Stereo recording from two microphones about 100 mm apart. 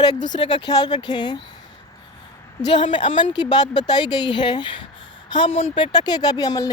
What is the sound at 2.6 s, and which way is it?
A woman's voice, 50° left (ahead or behind).